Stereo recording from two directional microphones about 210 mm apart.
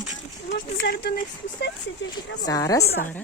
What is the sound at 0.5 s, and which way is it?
Speech, 45° left (ahead or behind).